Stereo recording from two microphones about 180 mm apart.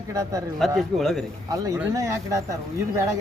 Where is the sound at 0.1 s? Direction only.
20° right (ahead or behind).